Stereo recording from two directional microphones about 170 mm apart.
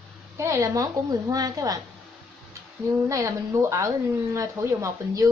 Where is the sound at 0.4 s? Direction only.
15° right (ahead or behind).